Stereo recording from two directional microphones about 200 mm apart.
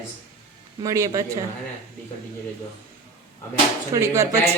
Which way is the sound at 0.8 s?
15° right (ahead or behind).